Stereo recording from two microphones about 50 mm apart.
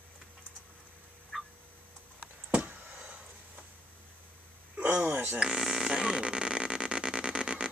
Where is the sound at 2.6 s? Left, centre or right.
Right.